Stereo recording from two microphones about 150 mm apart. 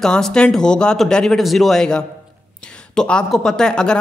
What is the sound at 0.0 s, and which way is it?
Speech, 5° left (ahead or behind).